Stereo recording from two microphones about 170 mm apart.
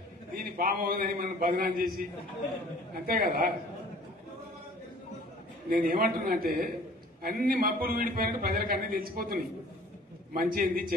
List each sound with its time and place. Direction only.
0.4 s a man's voice: 60° right (ahead or behind)
2.9 s a man's voice: 60° right (ahead or behind)
5.7 s a man's voice: 60° right (ahead or behind)